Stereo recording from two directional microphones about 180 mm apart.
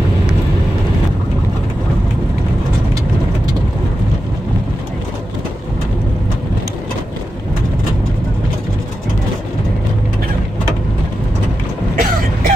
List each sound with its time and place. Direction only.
12.0 s throat clearing: 50° right (ahead or behind)